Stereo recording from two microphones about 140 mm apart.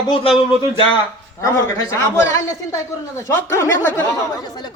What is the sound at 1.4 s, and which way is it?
A man's voice, 20° left (ahead or behind).